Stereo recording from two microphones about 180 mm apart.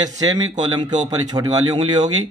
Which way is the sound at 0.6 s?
25° right (ahead or behind).